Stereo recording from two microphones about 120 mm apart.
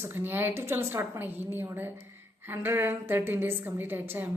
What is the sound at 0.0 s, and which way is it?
A woman's voice, 20° right (ahead or behind).